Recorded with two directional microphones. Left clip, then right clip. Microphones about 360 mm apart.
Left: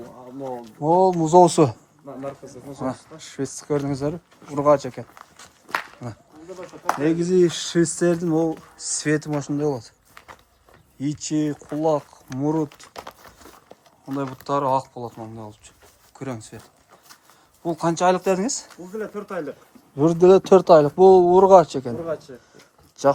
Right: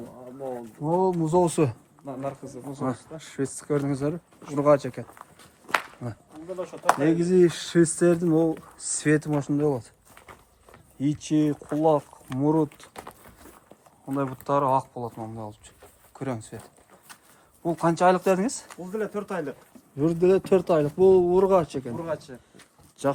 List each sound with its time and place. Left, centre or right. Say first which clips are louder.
0.9 s speech: left 7 dB; centre
2.8 s speech: left 2 dB; centre
11.0 s speech: even; centre
14.2 s speech: left 1 dB; centre
17.6 s speech: left 1 dB; centre
18.7 s speech: right 1 dB; right
20.0 s speech: left 7 dB; centre
22.0 s speech: left 3 dB; right
23.0 s speech: left 8 dB; centre